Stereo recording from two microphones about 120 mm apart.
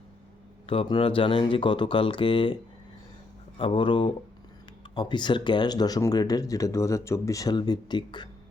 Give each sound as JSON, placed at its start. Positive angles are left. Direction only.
{"t": 0.7, "sound": "speech", "side_deg": 45}
{"t": 3.6, "sound": "speech", "side_deg": 45}